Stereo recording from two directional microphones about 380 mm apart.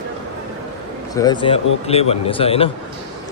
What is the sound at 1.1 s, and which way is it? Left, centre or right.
A man's voice, centre.